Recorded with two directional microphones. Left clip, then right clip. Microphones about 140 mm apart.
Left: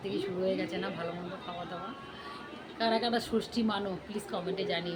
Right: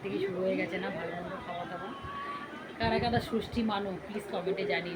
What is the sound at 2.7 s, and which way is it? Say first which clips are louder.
A woman's voice: even; 20° left (ahead or behind).